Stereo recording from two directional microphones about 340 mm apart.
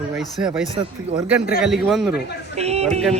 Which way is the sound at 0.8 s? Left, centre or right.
Centre.